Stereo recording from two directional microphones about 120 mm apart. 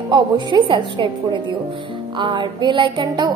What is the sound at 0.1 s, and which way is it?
A woman's voice, 40° right (ahead or behind).